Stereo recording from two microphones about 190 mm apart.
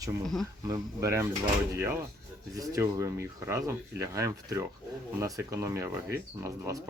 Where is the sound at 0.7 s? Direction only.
15° right (ahead or behind).